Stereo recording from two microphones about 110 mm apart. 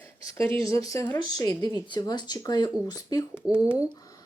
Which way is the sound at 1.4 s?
35° left (ahead or behind).